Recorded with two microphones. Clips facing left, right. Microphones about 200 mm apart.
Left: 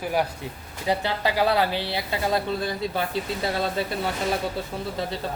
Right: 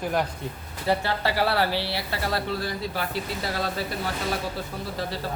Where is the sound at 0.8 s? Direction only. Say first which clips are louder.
Even; 15° left (ahead or behind).